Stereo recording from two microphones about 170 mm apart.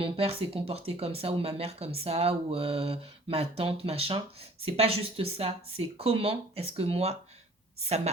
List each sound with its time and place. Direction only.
0.0 s speech: 35° right (ahead or behind)